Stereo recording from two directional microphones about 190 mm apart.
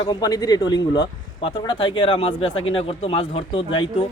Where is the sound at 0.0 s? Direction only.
20° left (ahead or behind).